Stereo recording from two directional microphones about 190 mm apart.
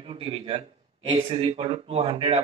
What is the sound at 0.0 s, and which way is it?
A man's voice, 30° right (ahead or behind).